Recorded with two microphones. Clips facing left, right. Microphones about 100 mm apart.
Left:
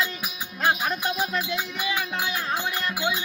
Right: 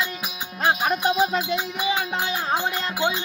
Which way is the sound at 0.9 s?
20° right (ahead or behind).